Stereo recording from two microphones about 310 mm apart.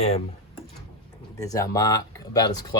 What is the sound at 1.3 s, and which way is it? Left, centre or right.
Speech, centre.